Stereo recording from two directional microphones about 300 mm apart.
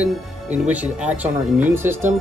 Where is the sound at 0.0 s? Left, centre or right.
Centre.